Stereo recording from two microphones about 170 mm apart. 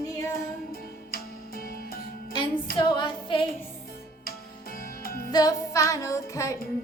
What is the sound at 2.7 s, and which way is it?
Music, 25° left (ahead or behind).